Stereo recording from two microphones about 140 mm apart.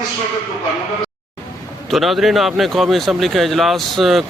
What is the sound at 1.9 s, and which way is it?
Speech, centre (ahead or behind).